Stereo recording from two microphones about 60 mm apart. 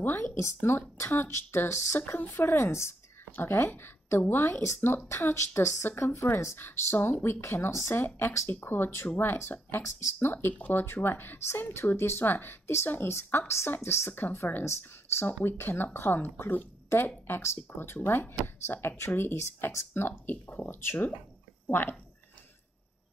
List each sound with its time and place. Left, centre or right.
0.0 s speech: left
0.4 s speech: left
2.0 s speech: left
2.2 s speech: left
3.3 s speech: left
5.9 s speech: left
6.1 s speech: left
17.6 s speech: left